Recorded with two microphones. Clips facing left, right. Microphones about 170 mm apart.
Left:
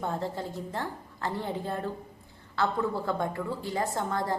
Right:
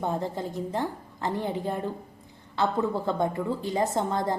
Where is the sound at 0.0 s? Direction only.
15° right (ahead or behind).